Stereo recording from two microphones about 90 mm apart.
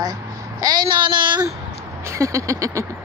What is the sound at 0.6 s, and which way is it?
Speech, 55° right (ahead or behind).